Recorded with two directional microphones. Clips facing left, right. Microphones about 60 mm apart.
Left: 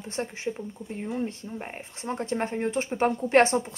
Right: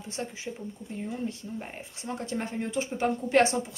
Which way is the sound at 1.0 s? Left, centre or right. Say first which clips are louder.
Left 3 dB; left.